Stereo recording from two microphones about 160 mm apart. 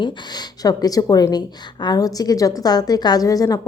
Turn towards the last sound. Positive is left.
turn(degrees=20)  # may be behind; listen again after turning